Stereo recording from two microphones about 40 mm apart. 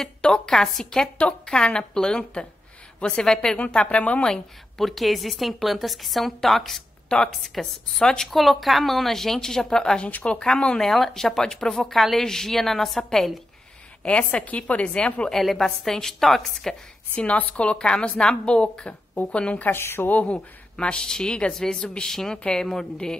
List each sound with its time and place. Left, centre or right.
0.2 s speech: centre
1.2 s a woman's voice: left
3.1 s speech: centre
3.5 s speech: left
4.7 s a woman's voice: centre
10.2 s a woman's voice: left
10.8 s speech: centre
14.0 s a woman's voice: left
15.3 s speech: centre
17.1 s a woman's voice: left
19.7 s a woman's voice: left
20.1 s speech: left
20.7 s a woman's voice: left
21.5 s speech: centre